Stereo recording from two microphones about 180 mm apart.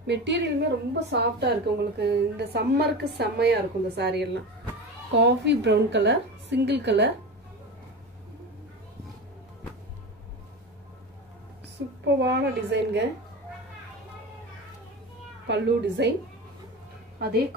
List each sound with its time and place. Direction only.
0.0 s a woman's voice: 75° right (ahead or behind)
12.2 s a woman's voice: 70° right (ahead or behind)
15.4 s a woman's voice: 70° right (ahead or behind)
17.2 s speech: 60° right (ahead or behind)